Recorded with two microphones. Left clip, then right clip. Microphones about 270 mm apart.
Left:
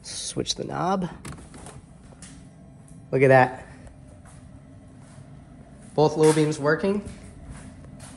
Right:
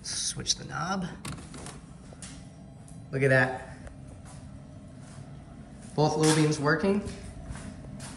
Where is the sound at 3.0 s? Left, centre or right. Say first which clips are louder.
Left 7 dB; centre.